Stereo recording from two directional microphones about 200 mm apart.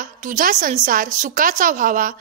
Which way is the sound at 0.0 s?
40° right (ahead or behind).